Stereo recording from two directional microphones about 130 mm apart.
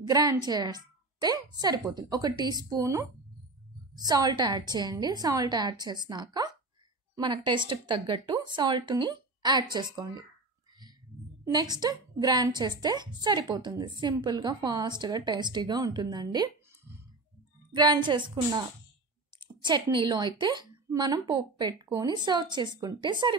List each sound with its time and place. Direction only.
0.1 s a woman's voice: 30° right (ahead or behind)
11.4 s a woman's voice: 30° right (ahead or behind)
17.7 s a woman's voice: 35° right (ahead or behind)